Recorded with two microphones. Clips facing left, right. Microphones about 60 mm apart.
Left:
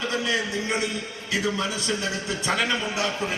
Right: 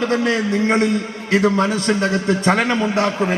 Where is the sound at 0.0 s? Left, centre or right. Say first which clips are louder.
Right 8 dB; right.